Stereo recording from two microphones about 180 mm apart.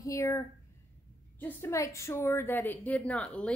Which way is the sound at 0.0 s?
15° left (ahead or behind).